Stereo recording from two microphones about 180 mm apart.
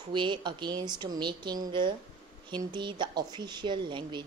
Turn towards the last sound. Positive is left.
turn(degrees=-25)  # may be behind; listen again after turning